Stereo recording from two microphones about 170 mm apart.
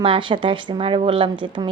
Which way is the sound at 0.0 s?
30° right (ahead or behind).